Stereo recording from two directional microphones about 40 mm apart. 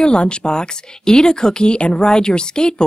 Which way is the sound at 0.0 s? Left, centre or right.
Left.